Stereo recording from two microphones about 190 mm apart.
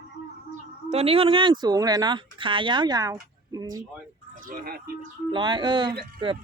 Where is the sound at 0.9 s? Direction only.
30° right (ahead or behind).